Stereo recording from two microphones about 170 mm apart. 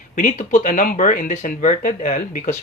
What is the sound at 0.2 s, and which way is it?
Speech, 50° left (ahead or behind).